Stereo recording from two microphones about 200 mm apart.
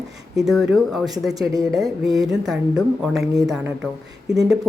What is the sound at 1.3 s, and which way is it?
Speech, 20° right (ahead or behind).